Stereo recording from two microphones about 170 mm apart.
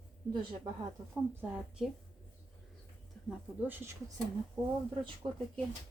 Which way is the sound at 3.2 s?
5° left (ahead or behind).